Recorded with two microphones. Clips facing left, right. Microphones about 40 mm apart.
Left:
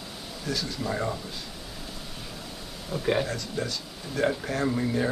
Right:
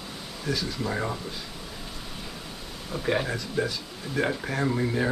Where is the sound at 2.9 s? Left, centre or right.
Centre.